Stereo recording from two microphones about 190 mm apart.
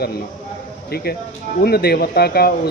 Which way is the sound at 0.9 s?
55° left (ahead or behind).